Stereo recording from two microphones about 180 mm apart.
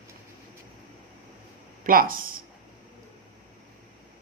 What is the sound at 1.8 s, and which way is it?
Speech, 50° right (ahead or behind).